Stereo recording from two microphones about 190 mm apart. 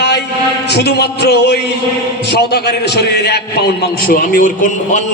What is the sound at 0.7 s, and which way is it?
A man's voice, 60° left (ahead or behind).